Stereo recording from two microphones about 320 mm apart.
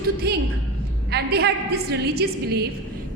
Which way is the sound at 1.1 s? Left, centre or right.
Right.